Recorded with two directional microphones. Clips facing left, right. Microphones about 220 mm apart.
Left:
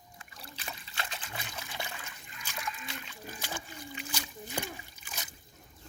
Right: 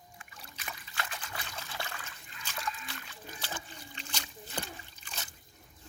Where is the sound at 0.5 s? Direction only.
25° left (ahead or behind).